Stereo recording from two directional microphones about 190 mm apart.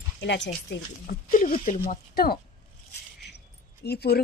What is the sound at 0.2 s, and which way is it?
A woman's voice, 65° left (ahead or behind).